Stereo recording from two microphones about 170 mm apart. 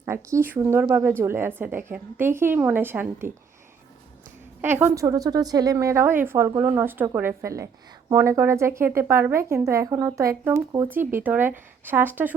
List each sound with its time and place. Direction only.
0.0 s a woman's voice: 15° right (ahead or behind)
4.6 s a woman's voice: 10° right (ahead or behind)